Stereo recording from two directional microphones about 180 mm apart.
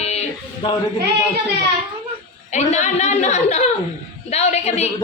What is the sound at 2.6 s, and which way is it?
A woman's voice, 40° left (ahead or behind).